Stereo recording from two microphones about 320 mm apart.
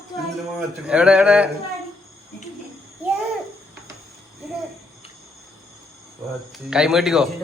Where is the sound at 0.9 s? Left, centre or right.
Centre.